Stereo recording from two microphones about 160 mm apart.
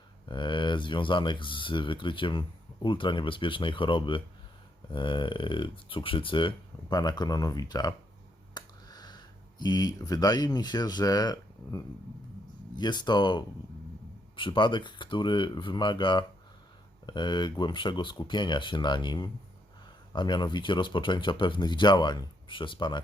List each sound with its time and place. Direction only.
0.3 s speech: 30° left (ahead or behind)